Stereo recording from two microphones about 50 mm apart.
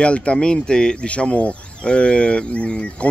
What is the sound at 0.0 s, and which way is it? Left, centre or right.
Speech, left.